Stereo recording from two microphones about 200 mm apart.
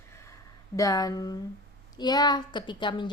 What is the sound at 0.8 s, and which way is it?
Speech, 20° left (ahead or behind).